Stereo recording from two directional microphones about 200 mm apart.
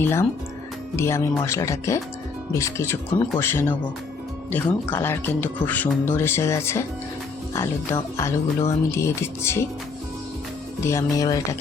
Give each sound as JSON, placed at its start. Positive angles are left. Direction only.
{"t": 0.0, "sound": "speech", "side_deg": 10}
{"t": 10.8, "sound": "speech", "side_deg": 15}